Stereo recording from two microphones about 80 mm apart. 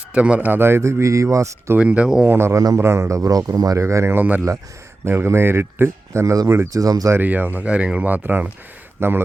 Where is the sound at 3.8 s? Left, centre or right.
Right.